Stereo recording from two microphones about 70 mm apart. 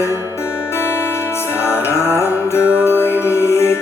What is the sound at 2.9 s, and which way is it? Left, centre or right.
Music, left.